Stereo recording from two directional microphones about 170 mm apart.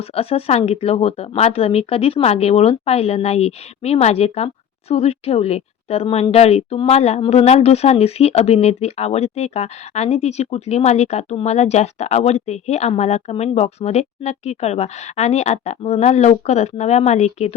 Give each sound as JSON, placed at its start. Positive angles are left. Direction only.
{"t": 0.2, "sound": "speech", "side_deg": 35}